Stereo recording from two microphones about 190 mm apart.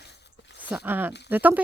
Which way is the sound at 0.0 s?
65° left (ahead or behind).